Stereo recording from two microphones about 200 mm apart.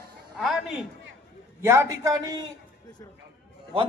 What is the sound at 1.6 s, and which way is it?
Speech, 15° right (ahead or behind).